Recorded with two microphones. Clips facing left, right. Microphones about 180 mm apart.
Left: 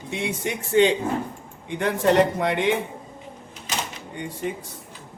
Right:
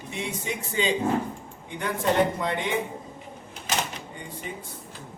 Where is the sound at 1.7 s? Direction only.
85° left.